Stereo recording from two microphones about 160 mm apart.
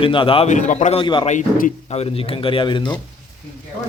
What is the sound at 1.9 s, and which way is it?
Speech, 40° left (ahead or behind).